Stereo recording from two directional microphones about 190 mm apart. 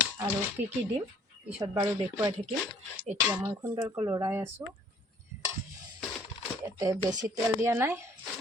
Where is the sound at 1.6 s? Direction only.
15° right (ahead or behind).